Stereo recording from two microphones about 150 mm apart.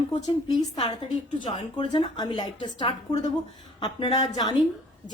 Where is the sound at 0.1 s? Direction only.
45° left (ahead or behind).